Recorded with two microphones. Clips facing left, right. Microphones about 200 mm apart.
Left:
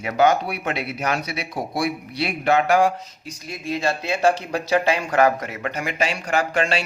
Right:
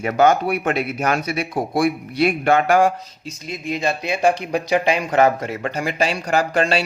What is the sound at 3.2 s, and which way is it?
Speech, 20° right (ahead or behind).